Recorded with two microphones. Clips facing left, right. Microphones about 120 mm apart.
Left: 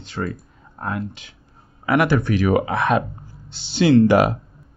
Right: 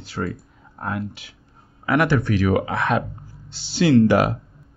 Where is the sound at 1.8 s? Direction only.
10° left (ahead or behind).